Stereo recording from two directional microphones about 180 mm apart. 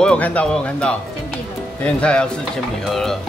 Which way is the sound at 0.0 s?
5° left (ahead or behind).